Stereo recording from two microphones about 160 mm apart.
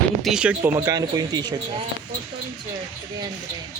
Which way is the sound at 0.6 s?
20° right (ahead or behind).